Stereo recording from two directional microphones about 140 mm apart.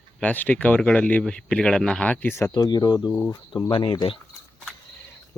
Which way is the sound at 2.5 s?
30° left (ahead or behind).